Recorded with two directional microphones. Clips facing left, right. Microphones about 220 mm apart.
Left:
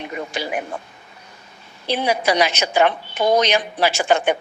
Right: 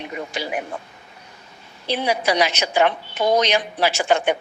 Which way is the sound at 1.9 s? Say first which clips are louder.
Left 1 dB; 50° left (ahead or behind).